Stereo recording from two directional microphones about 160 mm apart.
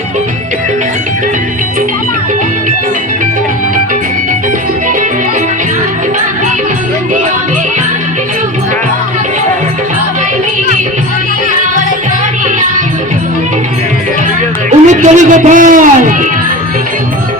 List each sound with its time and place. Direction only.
14.8 s a man's voice: 50° right (ahead or behind)